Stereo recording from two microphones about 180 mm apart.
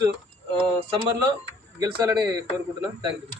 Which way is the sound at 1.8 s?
20° right (ahead or behind).